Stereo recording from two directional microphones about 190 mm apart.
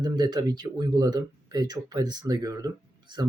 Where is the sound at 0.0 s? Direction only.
20° right (ahead or behind).